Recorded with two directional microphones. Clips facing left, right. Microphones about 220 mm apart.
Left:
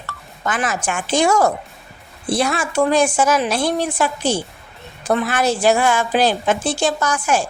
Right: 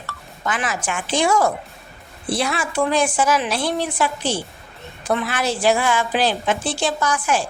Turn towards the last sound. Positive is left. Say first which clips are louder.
# left 2 dB
turn(degrees=45)  # may be behind; listen again after turning